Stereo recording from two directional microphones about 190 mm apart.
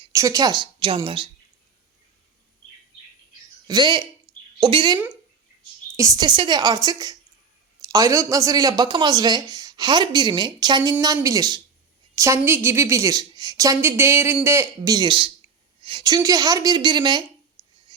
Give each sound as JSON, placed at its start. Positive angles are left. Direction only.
{"t": 0.0, "sound": "a woman's voice", "side_deg": -15}
{"t": 3.7, "sound": "speech", "side_deg": -25}
{"t": 6.0, "sound": "a woman's voice", "side_deg": -20}